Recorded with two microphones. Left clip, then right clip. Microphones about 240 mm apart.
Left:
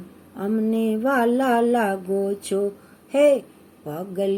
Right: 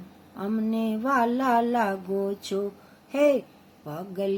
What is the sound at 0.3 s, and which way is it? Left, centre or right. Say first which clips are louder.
Speech: left 5 dB; centre.